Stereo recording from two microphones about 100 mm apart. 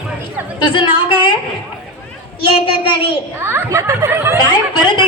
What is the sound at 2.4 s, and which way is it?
Speech, 60° left (ahead or behind).